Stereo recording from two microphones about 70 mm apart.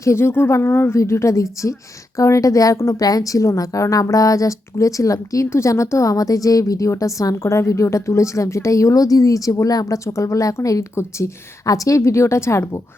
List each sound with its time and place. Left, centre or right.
0.0 s a woman's voice: left